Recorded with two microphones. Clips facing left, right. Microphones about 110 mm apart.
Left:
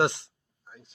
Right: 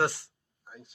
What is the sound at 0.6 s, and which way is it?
Speech, 5° right (ahead or behind).